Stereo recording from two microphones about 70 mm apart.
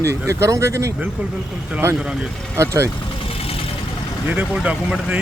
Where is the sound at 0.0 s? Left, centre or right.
Right.